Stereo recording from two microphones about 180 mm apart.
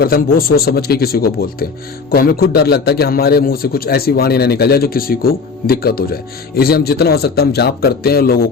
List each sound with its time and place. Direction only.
0.0 s a man's voice: 55° left (ahead or behind)